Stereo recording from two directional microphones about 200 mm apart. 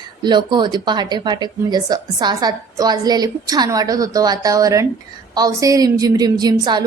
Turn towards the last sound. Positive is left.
turn(degrees=-20)  # may be behind; listen again after turning